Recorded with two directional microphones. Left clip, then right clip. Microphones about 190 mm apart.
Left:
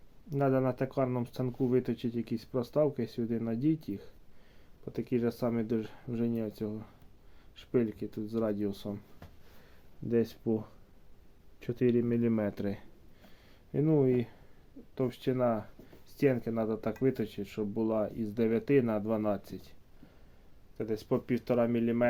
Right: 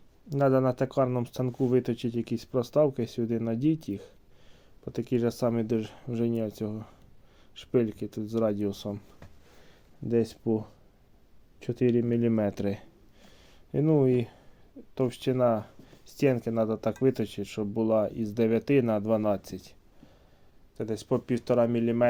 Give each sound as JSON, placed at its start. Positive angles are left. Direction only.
{"t": 0.3, "sound": "speech", "side_deg": -35}
{"t": 10.1, "sound": "speech", "side_deg": -20}
{"t": 20.7, "sound": "speech", "side_deg": -35}